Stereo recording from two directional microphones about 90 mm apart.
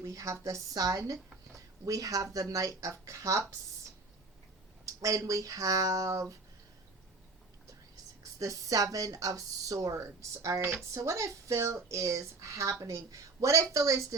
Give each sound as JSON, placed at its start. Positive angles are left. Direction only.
{"t": 0.0, "sound": "speech", "side_deg": -35}
{"t": 4.9, "sound": "speech", "side_deg": -40}
{"t": 8.2, "sound": "speech", "side_deg": -40}